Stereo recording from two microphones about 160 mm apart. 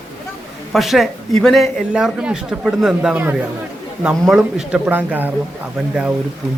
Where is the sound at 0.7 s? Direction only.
Centre (ahead or behind).